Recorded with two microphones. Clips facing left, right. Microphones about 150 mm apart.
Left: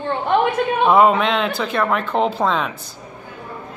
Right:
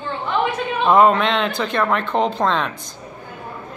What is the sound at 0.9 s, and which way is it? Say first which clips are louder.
Speech: right 1 dB; 5° left (ahead or behind).